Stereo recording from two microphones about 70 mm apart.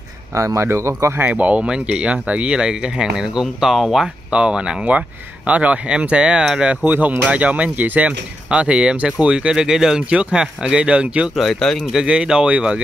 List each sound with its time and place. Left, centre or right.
0.3 s speech: right
1.2 s speech: centre
4.3 s speech: centre
6.8 s speech: right
11.3 s speech: centre
11.9 s speech: centre